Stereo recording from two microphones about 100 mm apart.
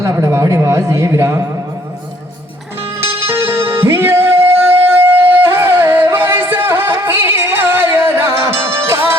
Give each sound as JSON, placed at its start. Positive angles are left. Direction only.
{"t": 0.0, "sound": "speech", "side_deg": -30}
{"t": 3.2, "sound": "music", "side_deg": -25}